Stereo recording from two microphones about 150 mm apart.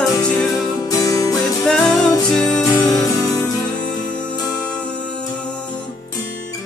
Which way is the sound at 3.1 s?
25° left (ahead or behind).